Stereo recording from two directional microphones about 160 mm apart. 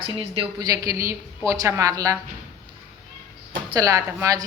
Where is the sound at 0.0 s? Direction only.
35° right (ahead or behind).